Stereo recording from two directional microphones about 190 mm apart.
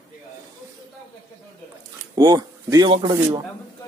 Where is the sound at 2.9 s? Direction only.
25° right (ahead or behind).